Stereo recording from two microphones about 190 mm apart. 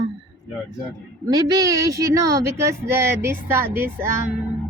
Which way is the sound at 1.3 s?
20° right (ahead or behind).